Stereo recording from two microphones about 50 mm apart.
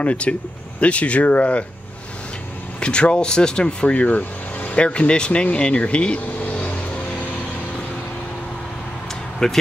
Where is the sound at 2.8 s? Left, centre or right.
Left.